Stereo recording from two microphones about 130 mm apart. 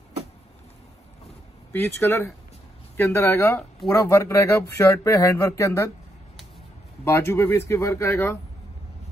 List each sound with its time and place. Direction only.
1.7 s speech: 20° left (ahead or behind)
7.1 s speech: 20° left (ahead or behind)